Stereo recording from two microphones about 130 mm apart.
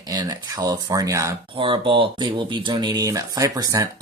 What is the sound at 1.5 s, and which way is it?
Speech, 40° right (ahead or behind).